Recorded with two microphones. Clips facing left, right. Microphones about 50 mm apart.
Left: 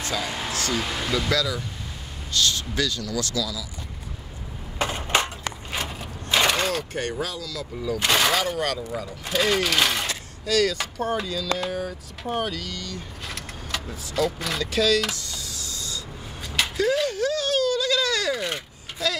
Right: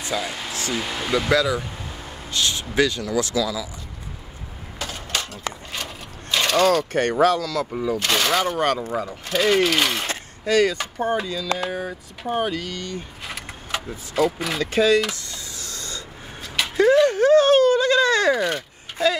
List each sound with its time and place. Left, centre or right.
0.1 s speech: centre
0.8 s speech: centre
1.1 s speech: right
4.7 s a sound: left
6.3 s pulleys: centre
6.9 s speech: right
7.7 s speech: right
8.0 s speech: centre
8.5 s speech: right
9.3 s speech: centre
10.0 s speech: right
15.0 s a sound: centre
15.5 s a sound: right